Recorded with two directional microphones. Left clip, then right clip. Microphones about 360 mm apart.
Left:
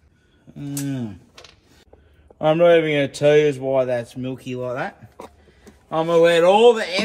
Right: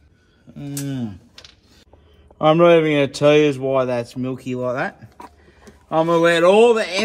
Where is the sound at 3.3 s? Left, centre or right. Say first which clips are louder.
Right 1 dB; right.